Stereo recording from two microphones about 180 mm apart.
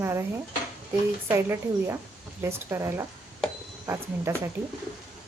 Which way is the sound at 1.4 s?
15° right (ahead or behind).